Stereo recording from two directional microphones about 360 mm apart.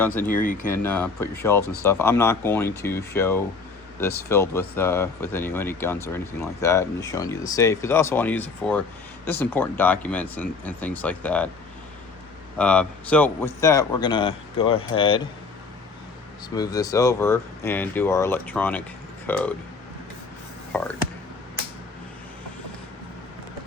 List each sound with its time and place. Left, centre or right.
0.3 s speech: left
0.7 s speech: centre
12.5 s speech: centre
16.6 s speech: centre